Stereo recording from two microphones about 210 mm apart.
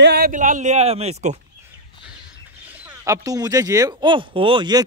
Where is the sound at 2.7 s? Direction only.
10° right (ahead or behind).